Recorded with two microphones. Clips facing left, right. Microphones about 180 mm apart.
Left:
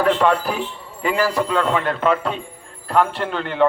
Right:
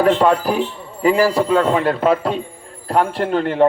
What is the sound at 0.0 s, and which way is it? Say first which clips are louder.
A man's voice: right 3 dB; 40° right (ahead or behind).